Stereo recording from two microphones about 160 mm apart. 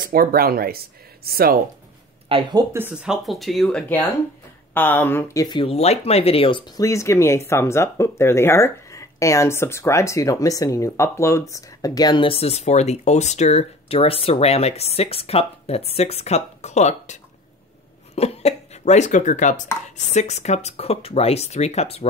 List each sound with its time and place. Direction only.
0.0 s speech: 65° right (ahead or behind)
2.2 s speech: 35° right (ahead or behind)
2.7 s speech: 10° right (ahead or behind)
4.7 s speech: 10° left (ahead or behind); by 6.6 s 35° left (ahead or behind)
6.8 s speech: 20° left (ahead or behind); by 22.0 s 40° left (ahead or behind)